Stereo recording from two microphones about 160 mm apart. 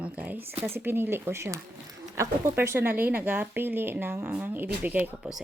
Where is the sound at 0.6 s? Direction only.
15° right (ahead or behind).